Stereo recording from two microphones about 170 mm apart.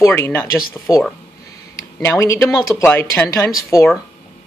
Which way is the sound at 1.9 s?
15° left (ahead or behind).